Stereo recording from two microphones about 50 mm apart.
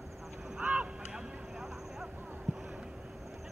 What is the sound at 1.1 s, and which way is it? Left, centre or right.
Vehicle, centre.